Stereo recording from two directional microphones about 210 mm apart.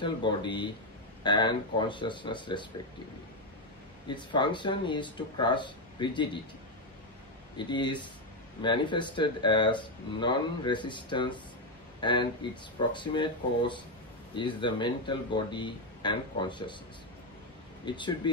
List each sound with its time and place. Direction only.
0.0 s speech: 20° left (ahead or behind)
4.1 s speech: 20° left (ahead or behind)
7.5 s speech: 20° left (ahead or behind)
17.8 s speech: 20° left (ahead or behind)